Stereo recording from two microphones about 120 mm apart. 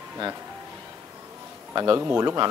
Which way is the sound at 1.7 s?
35° right (ahead or behind).